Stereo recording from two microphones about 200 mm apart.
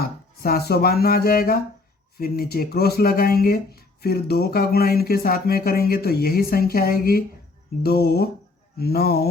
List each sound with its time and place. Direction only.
0.0 s speech: 50° left (ahead or behind)